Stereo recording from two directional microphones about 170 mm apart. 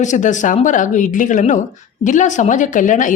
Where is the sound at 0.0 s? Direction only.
45° left (ahead or behind).